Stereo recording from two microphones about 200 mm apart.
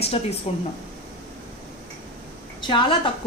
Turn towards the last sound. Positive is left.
turn(degrees=25)  # may be behind; listen again after turning